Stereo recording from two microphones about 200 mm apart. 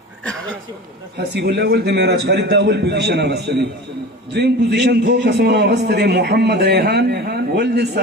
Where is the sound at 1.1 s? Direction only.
55° right (ahead or behind).